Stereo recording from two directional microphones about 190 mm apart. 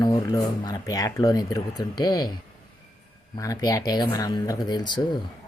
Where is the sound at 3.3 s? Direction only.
20° left (ahead or behind).